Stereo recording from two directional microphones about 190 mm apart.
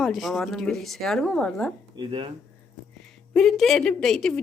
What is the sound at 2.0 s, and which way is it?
Speech, 25° right (ahead or behind).